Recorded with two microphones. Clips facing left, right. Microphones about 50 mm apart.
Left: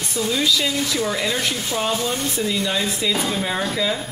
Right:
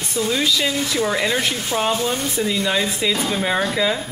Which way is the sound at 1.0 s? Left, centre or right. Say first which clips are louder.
Right 2 dB; centre.